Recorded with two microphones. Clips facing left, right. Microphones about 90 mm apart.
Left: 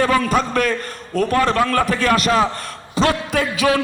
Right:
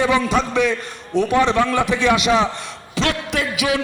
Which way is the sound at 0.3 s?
Centre (ahead or behind).